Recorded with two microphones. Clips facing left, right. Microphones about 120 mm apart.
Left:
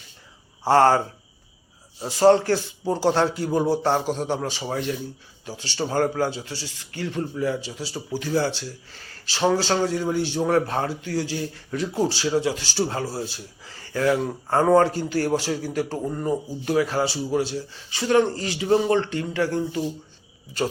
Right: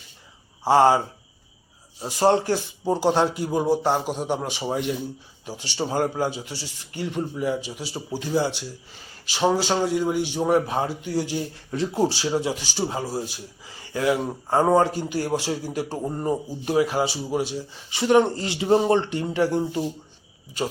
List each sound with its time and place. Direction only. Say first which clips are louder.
0.6 s speech: even; 10° right (ahead or behind)
16.0 s speech: even; 30° right (ahead or behind)